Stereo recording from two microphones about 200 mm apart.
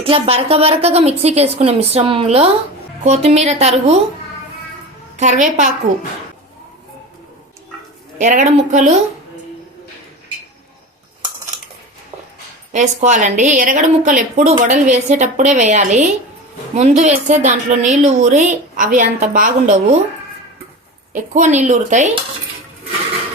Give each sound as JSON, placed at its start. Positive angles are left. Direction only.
{"t": 0.0, "sound": "a woman's voice", "side_deg": -30}
{"t": 5.1, "sound": "a woman's voice", "side_deg": -35}
{"t": 8.2, "sound": "a woman's voice", "side_deg": -40}
{"t": 12.7, "sound": "a woman's voice", "side_deg": -35}
{"t": 21.1, "sound": "a woman's voice", "side_deg": -35}